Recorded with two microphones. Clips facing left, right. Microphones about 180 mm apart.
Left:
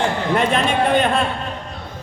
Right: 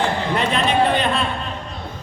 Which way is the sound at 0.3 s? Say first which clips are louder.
Even; 55° left (ahead or behind).